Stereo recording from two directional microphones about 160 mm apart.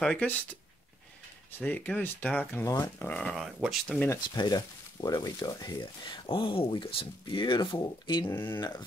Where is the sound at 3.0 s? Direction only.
5° left (ahead or behind).